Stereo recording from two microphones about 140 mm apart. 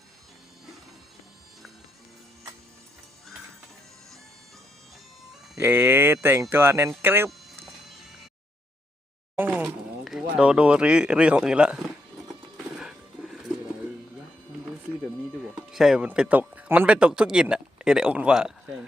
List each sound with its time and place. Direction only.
5.5 s speech: 15° right (ahead or behind)
9.3 s a sound: 15° right (ahead or behind)
9.6 s a sound: 5° right (ahead or behind)
10.3 s speech: 5° right (ahead or behind)
12.7 s wild animals: 5° right (ahead or behind)
15.7 s speech: 5° right (ahead or behind)